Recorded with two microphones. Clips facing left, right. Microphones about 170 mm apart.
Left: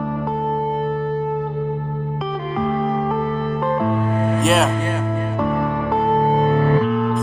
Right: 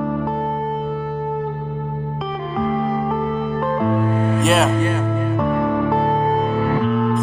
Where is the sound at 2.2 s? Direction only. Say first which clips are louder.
Even; centre (ahead or behind).